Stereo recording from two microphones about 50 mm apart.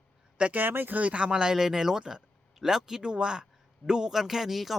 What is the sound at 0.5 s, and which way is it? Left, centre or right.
Speech, right.